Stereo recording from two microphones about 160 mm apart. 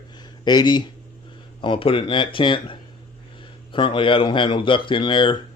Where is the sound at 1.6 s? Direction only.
30° left (ahead or behind).